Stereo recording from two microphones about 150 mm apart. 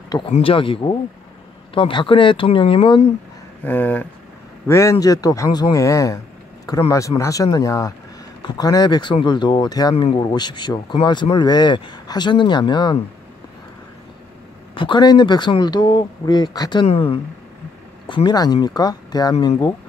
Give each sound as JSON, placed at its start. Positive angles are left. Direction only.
{"t": 0.3, "sound": "speech", "side_deg": 40}
{"t": 3.6, "sound": "speech", "side_deg": 10}
{"t": 9.9, "sound": "speech", "side_deg": 40}
{"t": 10.2, "sound": "speech", "side_deg": 30}
{"t": 14.7, "sound": "speech", "side_deg": 35}
{"t": 16.8, "sound": "speech", "side_deg": 40}